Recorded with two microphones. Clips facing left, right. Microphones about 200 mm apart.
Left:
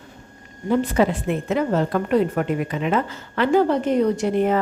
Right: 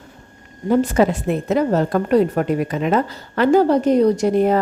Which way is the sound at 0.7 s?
45° right (ahead or behind).